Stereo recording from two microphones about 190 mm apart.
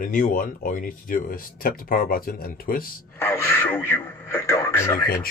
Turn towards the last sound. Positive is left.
turn(degrees=15)  # may be behind; listen again after turning